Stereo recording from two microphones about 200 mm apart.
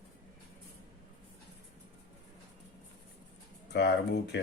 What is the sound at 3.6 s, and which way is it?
Speech, 55° left (ahead or behind).